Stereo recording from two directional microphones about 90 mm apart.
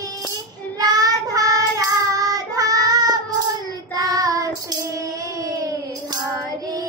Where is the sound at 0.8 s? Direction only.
45° right (ahead or behind).